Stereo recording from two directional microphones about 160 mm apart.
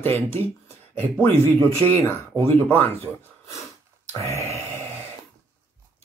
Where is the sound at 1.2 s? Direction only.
15° left (ahead or behind).